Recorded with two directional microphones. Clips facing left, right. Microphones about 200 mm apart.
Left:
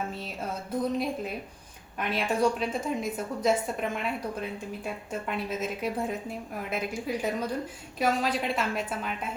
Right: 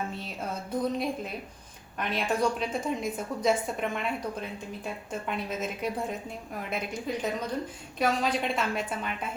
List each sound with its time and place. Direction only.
0.1 s music: centre (ahead or behind)
0.8 s a woman's voice: centre (ahead or behind)